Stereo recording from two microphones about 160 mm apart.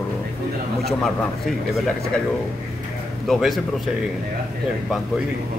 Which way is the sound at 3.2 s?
Centre (ahead or behind).